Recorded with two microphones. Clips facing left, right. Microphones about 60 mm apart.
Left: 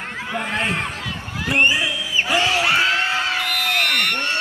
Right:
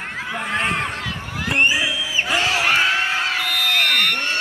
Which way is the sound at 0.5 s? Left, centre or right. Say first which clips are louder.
Right 2 dB; right.